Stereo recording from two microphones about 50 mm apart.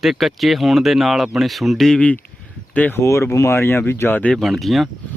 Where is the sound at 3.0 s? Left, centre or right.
Left.